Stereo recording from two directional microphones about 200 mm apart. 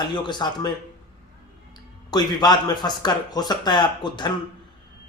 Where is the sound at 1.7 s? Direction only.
20° left (ahead or behind).